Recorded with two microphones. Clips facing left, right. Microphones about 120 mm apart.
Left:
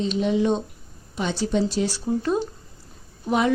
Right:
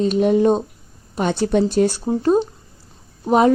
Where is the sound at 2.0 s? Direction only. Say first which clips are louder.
Right 6 dB; 35° right (ahead or behind).